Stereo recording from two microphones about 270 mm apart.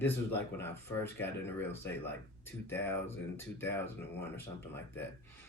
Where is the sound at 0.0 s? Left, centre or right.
Centre.